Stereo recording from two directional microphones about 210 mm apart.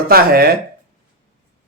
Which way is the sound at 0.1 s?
45° right (ahead or behind).